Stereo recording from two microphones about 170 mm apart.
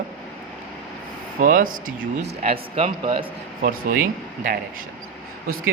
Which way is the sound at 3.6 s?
55° right (ahead or behind).